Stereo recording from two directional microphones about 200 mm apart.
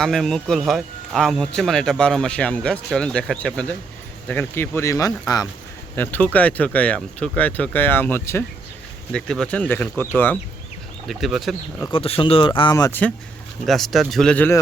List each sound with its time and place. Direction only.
0.0 s speech: centre (ahead or behind)
11.1 s speech: centre (ahead or behind)
11.9 s speech: 25° left (ahead or behind); by 14.6 s 10° left (ahead or behind)